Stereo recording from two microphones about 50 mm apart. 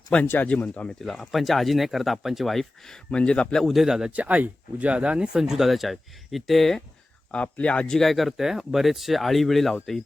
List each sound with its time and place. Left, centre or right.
0.1 s speech: left
0.9 s speech: centre
3.2 s speech: left
3.6 s speech: centre
4.1 s speech: right
5.4 s speech: centre
7.3 s speech: left
7.9 s speech: centre